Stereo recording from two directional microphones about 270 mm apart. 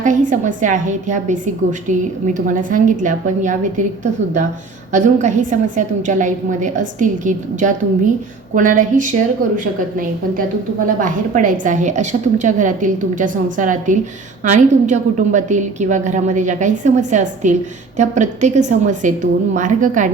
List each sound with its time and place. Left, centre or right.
0.0 s a woman's voice: right
10.8 s a woman's voice: right